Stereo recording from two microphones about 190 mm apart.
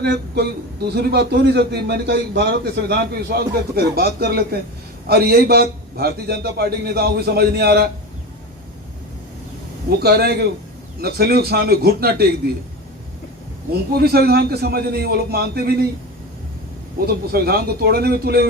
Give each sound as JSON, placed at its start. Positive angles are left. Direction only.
{"t": 0.0, "sound": "a man's voice", "side_deg": -60}
{"t": 10.0, "sound": "a man's voice", "side_deg": -55}
{"t": 13.9, "sound": "a man's voice", "side_deg": -55}
{"t": 17.1, "sound": "a man's voice", "side_deg": -55}